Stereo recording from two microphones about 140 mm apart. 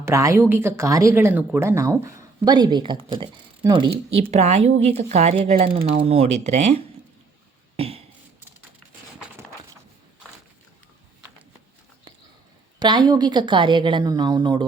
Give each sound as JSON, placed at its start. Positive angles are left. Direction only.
{"t": 0.0, "sound": "a woman's voice", "side_deg": -20}
{"t": 7.8, "sound": "a sound", "side_deg": -45}
{"t": 12.8, "sound": "a woman's voice", "side_deg": -30}